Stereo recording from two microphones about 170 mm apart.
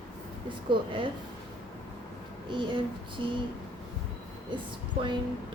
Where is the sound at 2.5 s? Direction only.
30° right (ahead or behind).